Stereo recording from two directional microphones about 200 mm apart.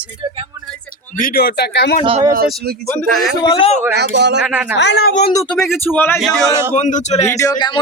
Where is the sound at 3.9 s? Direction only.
55° right (ahead or behind).